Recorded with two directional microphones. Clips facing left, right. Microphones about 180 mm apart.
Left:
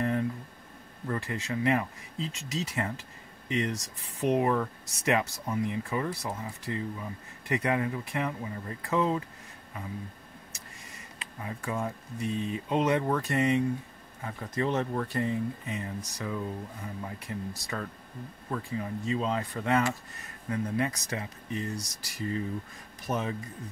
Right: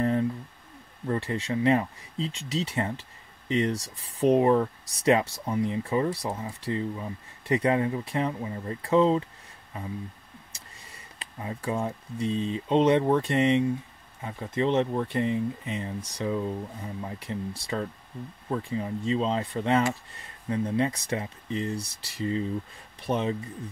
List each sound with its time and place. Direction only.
0.0 s a sound: 30° right (ahead or behind)
1.0 s speech: 30° right (ahead or behind)
10.5 s speech: 30° right (ahead or behind)